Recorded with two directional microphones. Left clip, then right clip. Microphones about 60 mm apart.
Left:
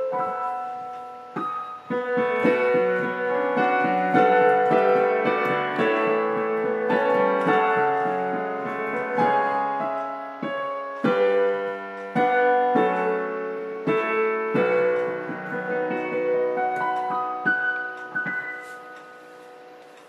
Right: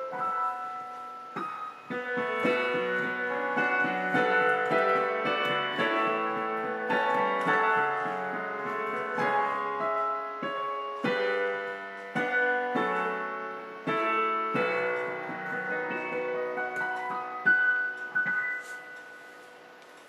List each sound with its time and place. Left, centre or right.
1.9 s music: centre
9.3 s music: centre